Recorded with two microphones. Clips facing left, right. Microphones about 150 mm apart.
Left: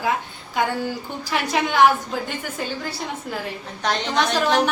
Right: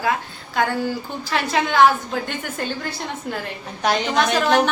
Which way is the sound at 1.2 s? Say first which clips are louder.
Right 1 dB; 15° left (ahead or behind).